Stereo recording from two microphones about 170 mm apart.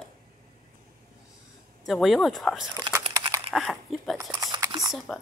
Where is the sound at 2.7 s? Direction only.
25° right (ahead or behind).